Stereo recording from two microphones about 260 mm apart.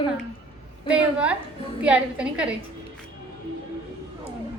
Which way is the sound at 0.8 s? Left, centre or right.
Centre.